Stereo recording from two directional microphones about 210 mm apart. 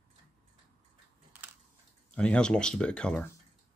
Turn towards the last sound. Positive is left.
turn(degrees=5)  # may be behind; listen again after turning